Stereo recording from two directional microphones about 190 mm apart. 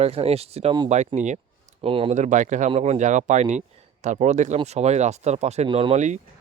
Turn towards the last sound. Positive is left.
turn(degrees=-40)  # may be behind; listen again after turning